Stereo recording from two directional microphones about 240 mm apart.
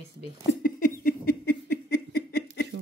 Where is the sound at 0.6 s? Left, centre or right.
Left.